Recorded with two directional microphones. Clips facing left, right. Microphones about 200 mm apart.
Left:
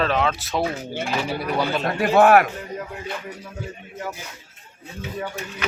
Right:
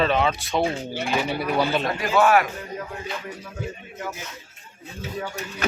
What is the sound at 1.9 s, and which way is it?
Speech, 60° left (ahead or behind).